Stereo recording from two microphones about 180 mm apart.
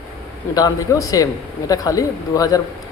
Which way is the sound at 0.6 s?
20° left (ahead or behind).